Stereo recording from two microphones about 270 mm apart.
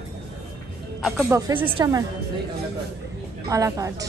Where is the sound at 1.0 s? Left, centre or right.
Centre.